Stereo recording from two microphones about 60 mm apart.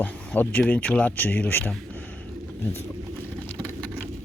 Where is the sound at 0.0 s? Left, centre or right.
Left.